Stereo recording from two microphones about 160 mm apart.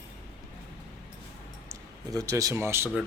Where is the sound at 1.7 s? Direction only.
20° right (ahead or behind).